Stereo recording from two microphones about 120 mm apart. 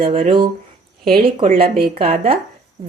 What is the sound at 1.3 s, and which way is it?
A woman's voice, 55° right (ahead or behind).